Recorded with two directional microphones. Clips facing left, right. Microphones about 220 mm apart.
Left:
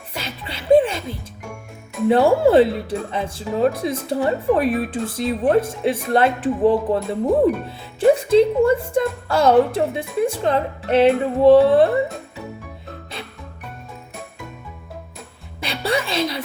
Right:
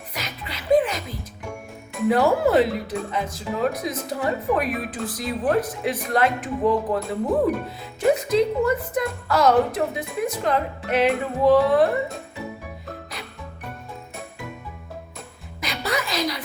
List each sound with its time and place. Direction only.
0.1 s music: 30° left (ahead or behind)
2.0 s speech: 30° left (ahead or behind)
15.6 s a sound: 30° left (ahead or behind)